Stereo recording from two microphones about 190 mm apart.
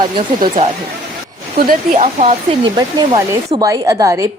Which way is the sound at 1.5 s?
50° right (ahead or behind).